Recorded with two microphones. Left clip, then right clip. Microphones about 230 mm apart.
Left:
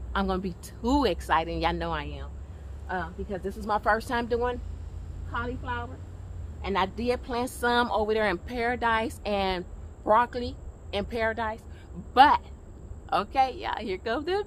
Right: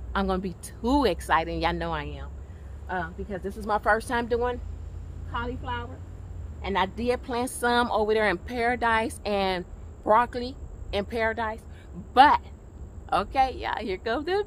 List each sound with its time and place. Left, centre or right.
0.1 s speech: centre
6.6 s speech: centre